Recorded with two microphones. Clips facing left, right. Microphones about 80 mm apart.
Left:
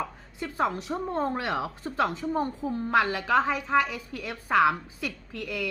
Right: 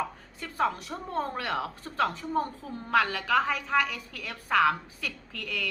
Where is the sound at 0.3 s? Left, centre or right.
Centre.